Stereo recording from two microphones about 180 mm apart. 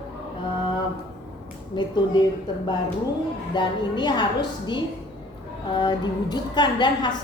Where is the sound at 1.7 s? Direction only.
25° left (ahead or behind).